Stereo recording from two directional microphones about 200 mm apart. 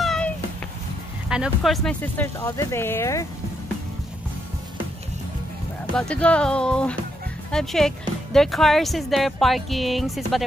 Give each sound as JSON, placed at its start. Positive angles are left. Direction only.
{"t": 0.0, "sound": "cat", "side_deg": 0}
{"t": 1.3, "sound": "speech", "side_deg": 0}
{"t": 5.9, "sound": "speech", "side_deg": 5}